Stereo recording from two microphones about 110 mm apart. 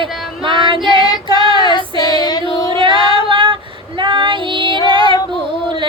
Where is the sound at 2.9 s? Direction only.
40° left (ahead or behind).